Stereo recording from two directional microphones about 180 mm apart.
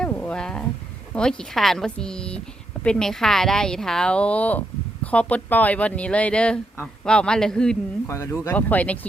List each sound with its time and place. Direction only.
0.0 s a sound: 5° left (ahead or behind)
1.1 s speech: 5° left (ahead or behind)
8.0 s speech: 15° left (ahead or behind)